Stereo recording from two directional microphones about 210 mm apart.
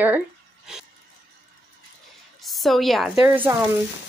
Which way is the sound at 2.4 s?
Centre (ahead or behind).